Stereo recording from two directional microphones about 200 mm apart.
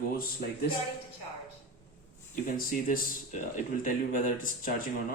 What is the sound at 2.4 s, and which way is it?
Speech, 40° left (ahead or behind).